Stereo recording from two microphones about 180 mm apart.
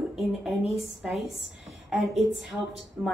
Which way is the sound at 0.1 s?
Centre (ahead or behind).